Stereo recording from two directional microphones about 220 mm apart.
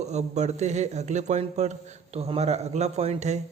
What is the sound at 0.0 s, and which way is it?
Speech, 30° right (ahead or behind).